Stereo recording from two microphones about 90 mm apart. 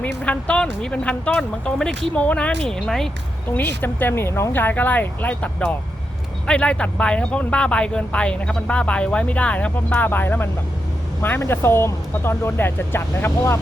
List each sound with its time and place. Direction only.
0.0 s speech: 15° left (ahead or behind)
3.5 s speech: 20° left (ahead or behind)